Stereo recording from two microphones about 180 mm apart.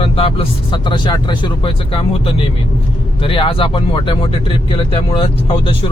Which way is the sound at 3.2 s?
30° left (ahead or behind).